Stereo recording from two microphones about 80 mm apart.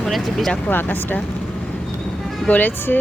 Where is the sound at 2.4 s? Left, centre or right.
Left.